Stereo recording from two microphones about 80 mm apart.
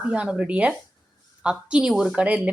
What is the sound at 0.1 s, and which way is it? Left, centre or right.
Speech, centre.